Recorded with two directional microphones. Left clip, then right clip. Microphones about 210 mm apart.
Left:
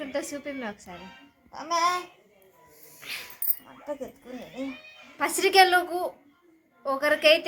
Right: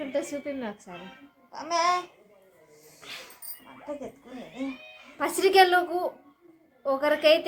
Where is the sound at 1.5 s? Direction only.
45° left (ahead or behind).